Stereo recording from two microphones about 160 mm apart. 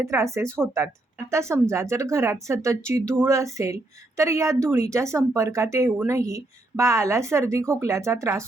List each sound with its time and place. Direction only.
0.0 s speech: 20° right (ahead or behind)